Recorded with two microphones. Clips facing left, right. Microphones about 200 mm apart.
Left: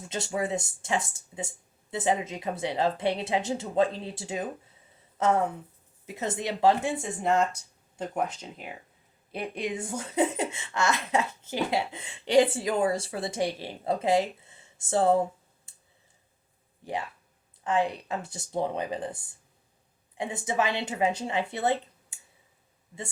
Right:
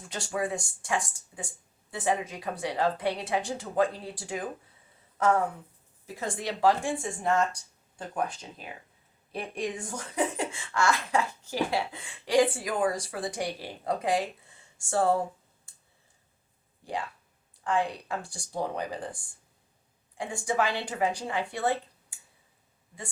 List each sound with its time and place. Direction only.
0.1 s speech: 25° left (ahead or behind)
9.9 s speech: 25° left (ahead or behind)
16.8 s speech: 20° left (ahead or behind)
20.1 s speech: 20° left (ahead or behind)